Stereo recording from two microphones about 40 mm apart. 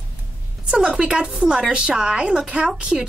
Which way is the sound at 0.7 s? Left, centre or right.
Centre.